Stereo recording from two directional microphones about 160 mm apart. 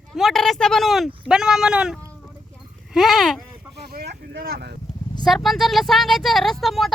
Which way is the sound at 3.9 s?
80° right.